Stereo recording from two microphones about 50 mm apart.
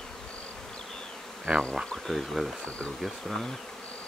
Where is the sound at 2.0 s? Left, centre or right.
Centre.